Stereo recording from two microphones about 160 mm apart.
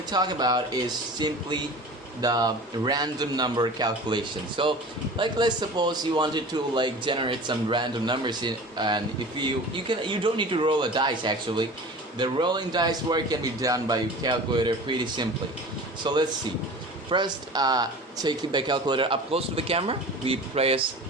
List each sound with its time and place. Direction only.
0.1 s a man's voice: 25° right (ahead or behind)